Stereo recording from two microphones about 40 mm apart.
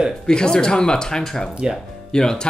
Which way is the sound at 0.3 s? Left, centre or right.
Centre.